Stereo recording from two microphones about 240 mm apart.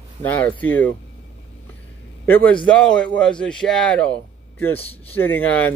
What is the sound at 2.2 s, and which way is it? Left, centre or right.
A man's voice, centre.